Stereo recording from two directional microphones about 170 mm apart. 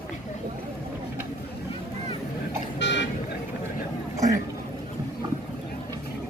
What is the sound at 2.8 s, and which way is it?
Vehicle, 90° left.